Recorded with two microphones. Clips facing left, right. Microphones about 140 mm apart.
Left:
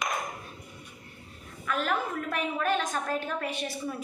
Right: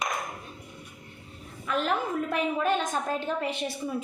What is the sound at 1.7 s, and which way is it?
A woman's voice, 20° right (ahead or behind).